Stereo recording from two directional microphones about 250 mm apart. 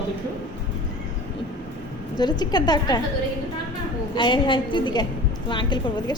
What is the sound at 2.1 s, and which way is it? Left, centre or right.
Speech, centre.